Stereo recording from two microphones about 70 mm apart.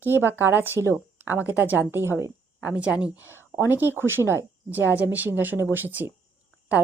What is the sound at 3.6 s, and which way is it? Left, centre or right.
Speech, right.